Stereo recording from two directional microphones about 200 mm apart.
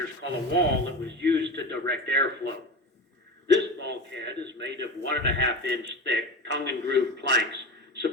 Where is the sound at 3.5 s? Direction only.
60° right (ahead or behind).